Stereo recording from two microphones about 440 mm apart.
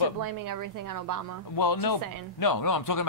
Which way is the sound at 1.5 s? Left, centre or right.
Left.